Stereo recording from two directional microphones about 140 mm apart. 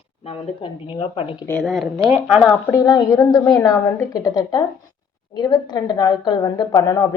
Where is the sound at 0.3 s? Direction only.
35° left (ahead or behind).